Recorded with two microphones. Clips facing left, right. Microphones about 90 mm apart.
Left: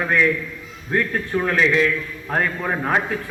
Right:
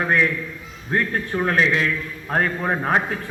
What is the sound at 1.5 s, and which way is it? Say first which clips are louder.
A man's voice: left 2 dB; 35° right (ahead or behind).